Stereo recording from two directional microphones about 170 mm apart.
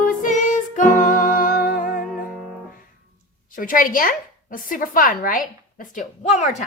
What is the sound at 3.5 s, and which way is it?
A woman's voice, 55° left (ahead or behind).